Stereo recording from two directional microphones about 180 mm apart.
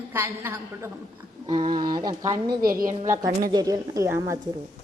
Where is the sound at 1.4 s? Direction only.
25° right (ahead or behind).